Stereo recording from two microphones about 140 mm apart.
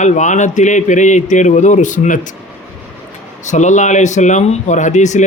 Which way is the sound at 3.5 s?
60° left (ahead or behind).